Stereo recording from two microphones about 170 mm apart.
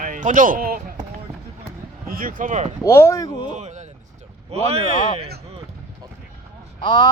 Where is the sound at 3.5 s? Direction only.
45° right (ahead or behind).